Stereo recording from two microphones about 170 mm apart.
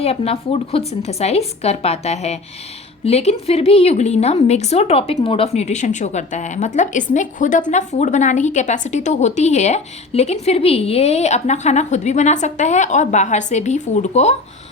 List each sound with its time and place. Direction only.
0.0 s a woman's voice: 35° left (ahead or behind)